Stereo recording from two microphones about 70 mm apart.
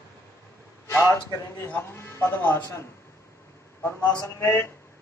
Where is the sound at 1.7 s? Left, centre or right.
Left.